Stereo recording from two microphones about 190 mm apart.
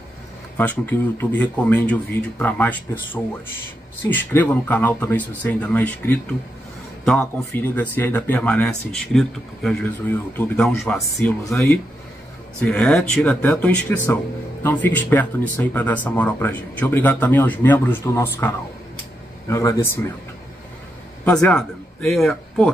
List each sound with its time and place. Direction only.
0.6 s speech: 10° left (ahead or behind)
12.6 s speech: 5° left (ahead or behind)
21.3 s speech: 5° left (ahead or behind)